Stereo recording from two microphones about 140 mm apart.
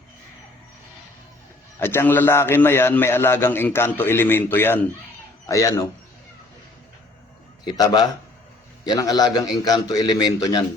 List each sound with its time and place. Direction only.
1.8 s a man's voice: 15° left (ahead or behind)
7.6 s a man's voice: 30° left (ahead or behind)